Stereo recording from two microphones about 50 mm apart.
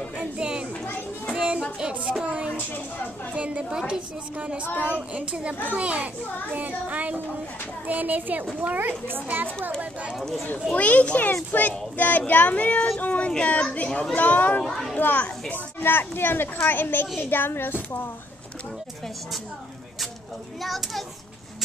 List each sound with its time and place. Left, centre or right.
0.2 s children playing: centre
1.3 s a sound: right
1.8 s a woman's voice: centre; by 9.5 s right
10.7 s a child's voice: left
11.5 s child singing: left
13.0 s a child's voice: left
14.1 s child singing: left
14.6 s speech: centre
15.0 s child singing: left
15.5 s a woman's voice: left
20.6 s speech: centre